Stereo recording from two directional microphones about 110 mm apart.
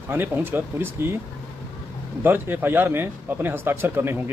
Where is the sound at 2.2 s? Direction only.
20° right (ahead or behind).